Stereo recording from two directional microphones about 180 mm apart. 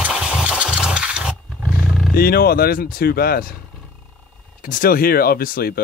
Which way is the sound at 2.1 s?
55° left (ahead or behind).